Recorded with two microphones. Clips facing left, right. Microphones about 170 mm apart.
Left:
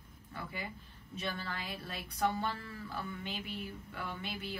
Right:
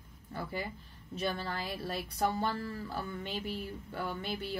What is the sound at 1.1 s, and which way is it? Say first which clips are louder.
A woman's voice: right 5 dB; 40° right (ahead or behind).